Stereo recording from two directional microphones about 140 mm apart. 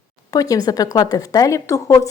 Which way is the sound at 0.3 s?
25° left (ahead or behind).